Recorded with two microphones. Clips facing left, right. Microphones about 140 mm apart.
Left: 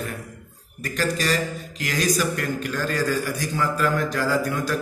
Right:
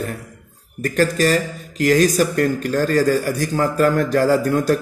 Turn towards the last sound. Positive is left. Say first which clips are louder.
# right 7 dB
turn(degrees=-45)  # may be behind; listen again after turning